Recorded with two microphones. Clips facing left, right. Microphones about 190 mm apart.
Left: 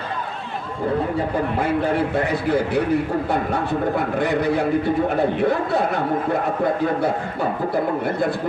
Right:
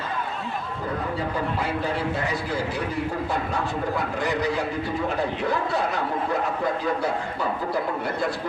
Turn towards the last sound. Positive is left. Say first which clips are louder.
# left 4 dB
turn(degrees=55)  # may be behind; listen again after turning